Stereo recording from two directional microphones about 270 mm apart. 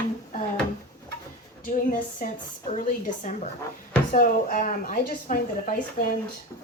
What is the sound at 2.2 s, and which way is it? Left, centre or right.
Speech, left.